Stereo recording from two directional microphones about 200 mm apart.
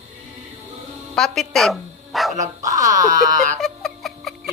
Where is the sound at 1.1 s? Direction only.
Centre (ahead or behind).